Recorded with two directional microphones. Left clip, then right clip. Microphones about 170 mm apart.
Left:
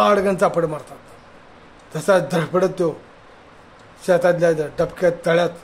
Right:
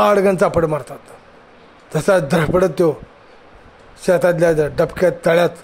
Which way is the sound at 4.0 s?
50° right (ahead or behind).